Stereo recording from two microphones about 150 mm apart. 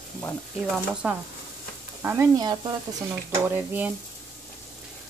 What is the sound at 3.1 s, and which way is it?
Speech, 15° right (ahead or behind).